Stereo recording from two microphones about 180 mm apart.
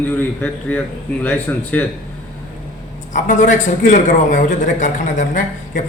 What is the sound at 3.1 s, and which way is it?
A man's voice, 45° left (ahead or behind).